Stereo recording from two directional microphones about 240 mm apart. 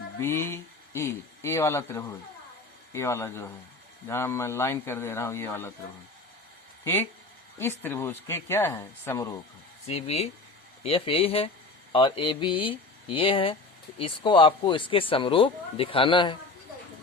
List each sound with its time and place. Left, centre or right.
0.2 s a man's voice: centre
6.8 s a man's voice: centre
9.8 s speech: left